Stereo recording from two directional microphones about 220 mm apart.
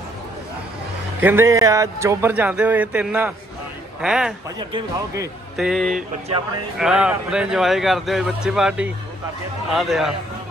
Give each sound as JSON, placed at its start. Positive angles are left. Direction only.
{"t": 1.2, "sound": "a man's voice", "side_deg": -10}
{"t": 4.6, "sound": "a man's voice", "side_deg": -15}
{"t": 5.6, "sound": "speech", "side_deg": 0}
{"t": 5.9, "sound": "speech", "side_deg": -30}
{"t": 6.8, "sound": "speech", "side_deg": -5}